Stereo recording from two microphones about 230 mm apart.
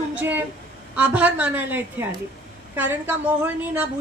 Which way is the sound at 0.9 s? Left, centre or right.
Centre.